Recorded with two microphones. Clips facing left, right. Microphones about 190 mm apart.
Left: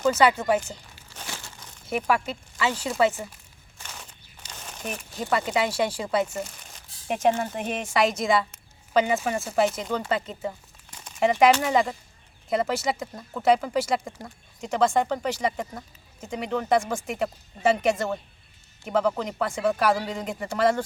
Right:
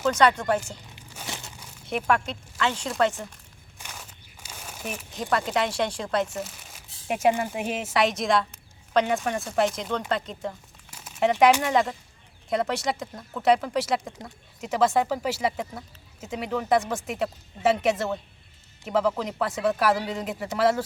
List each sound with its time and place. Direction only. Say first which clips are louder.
0.0 s speech: left 1 dB; 5° left (ahead or behind)
0.9 s crumpling: right 2 dB; 15° right (ahead or behind)
1.9 s speech: even; 5° left (ahead or behind)
3.8 s speech: even; 5° right (ahead or behind)
10.9 s a sound: even; 5° right (ahead or behind)
11.6 s speech: even; centre (ahead or behind)